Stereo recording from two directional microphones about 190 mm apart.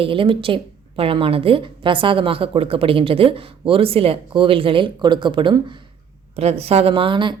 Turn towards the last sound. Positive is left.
turn(degrees=-25)  # may be behind; listen again after turning